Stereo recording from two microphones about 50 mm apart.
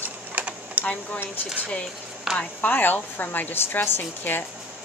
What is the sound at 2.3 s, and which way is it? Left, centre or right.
A woman's voice, left.